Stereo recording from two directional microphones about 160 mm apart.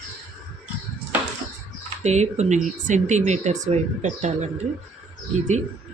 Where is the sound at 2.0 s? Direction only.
45° right (ahead or behind).